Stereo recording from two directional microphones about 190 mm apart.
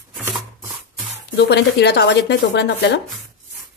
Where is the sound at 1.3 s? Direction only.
60° left (ahead or behind).